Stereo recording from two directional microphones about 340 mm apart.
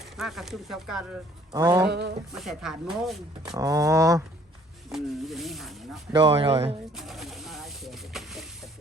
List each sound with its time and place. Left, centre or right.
0.2 s speech: centre
1.9 s speech: right
2.3 s speech: centre
6.1 s speech: centre
6.9 s snake: centre